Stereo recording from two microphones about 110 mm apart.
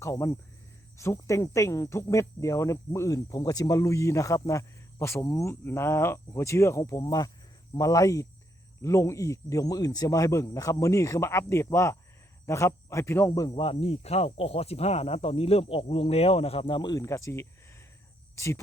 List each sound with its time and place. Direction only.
0.0 s speech: 25° left (ahead or behind)
13.5 s speech: 55° left (ahead or behind)
16.9 s speech: 30° left (ahead or behind)